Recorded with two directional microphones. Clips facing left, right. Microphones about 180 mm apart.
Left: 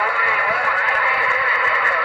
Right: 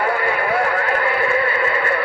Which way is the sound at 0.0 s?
40° right (ahead or behind).